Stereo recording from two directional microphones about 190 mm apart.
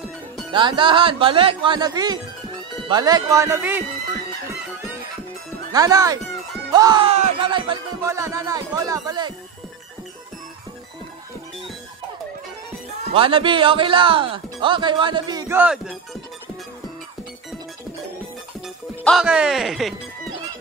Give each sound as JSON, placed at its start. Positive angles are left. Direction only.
{"t": 0.5, "sound": "speech", "side_deg": -25}
{"t": 5.7, "sound": "speech", "side_deg": -20}
{"t": 13.1, "sound": "speech", "side_deg": -30}
{"t": 19.0, "sound": "speech", "side_deg": -5}